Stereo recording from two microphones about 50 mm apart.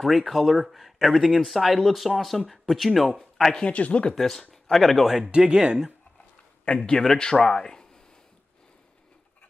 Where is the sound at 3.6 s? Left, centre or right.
Left.